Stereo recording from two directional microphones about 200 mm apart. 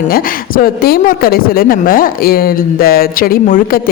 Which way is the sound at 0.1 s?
45° left (ahead or behind).